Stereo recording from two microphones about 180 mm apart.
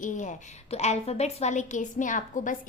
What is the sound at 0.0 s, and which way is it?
A woman's voice, 45° left (ahead or behind).